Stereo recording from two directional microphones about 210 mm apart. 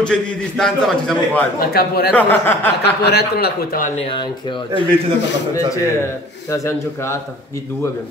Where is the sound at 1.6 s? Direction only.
45° left (ahead or behind).